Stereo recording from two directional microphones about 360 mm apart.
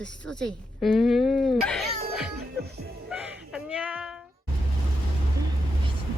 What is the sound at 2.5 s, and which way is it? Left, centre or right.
Music, right.